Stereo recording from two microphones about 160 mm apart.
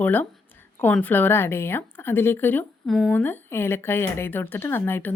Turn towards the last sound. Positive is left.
turn(degrees=15)  # may be behind; listen again after turning